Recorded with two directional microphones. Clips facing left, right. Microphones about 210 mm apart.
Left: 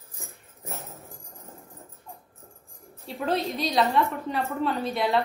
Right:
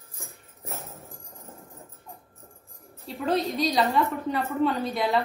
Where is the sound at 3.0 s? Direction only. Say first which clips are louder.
Right 1 dB; centre (ahead or behind).